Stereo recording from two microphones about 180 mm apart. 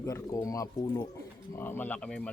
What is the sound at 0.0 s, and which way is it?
Speech, 20° left (ahead or behind).